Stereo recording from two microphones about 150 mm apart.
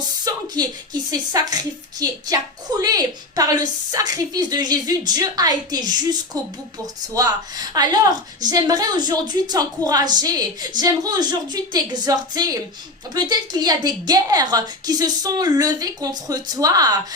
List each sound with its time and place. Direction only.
0.3 s a woman's voice: 25° right (ahead or behind)